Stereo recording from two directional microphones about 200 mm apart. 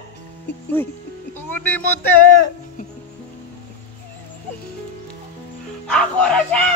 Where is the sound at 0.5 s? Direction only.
60° left (ahead or behind).